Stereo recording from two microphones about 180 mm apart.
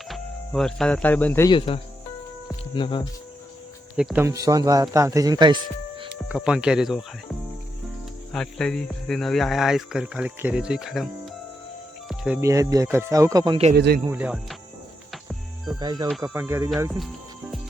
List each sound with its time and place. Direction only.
0.1 s speech: 5° left (ahead or behind)
1.5 s speech: 30° left (ahead or behind)
3.9 s a man's voice: 5° right (ahead or behind); by 5.5 s 20° right (ahead or behind)
6.2 s speech: 5° right (ahead or behind)
8.3 s speech: 5° left (ahead or behind)
12.0 s music: centre (ahead or behind)
12.4 s speech: 20° right (ahead or behind)
13.7 s speech: 65° right (ahead or behind)
14.1 s speech: 10° right (ahead or behind)
15.1 s music: centre (ahead or behind)
15.8 s a man's voice: 25° right (ahead or behind)